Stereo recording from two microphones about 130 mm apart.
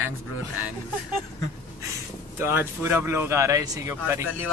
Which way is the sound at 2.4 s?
15° right (ahead or behind).